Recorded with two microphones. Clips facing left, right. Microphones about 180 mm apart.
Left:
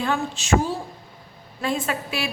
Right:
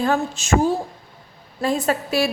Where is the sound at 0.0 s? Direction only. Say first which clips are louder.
Right 4 dB; 40° right (ahead or behind).